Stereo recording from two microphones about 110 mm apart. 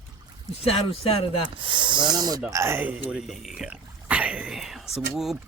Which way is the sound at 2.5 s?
25° right (ahead or behind).